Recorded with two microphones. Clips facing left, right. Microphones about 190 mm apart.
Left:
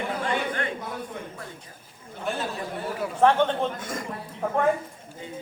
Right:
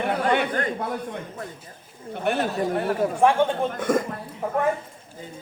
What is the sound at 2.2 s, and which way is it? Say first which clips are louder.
Speech: right 7 dB; 65° right (ahead or behind).